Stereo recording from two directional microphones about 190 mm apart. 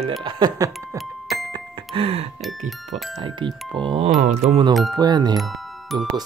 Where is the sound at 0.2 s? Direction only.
25° right (ahead or behind).